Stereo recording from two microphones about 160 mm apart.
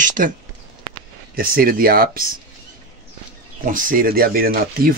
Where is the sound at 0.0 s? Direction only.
55° right (ahead or behind).